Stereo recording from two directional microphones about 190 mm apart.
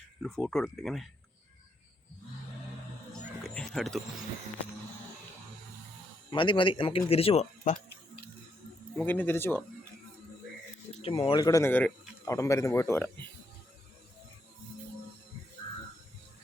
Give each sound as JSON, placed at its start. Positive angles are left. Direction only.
{"t": 0.2, "sound": "speech", "side_deg": 5}
{"t": 3.5, "sound": "speech", "side_deg": 5}
{"t": 6.3, "sound": "speech", "side_deg": 25}
{"t": 9.0, "sound": "speech", "side_deg": 10}
{"t": 11.0, "sound": "speech", "side_deg": 30}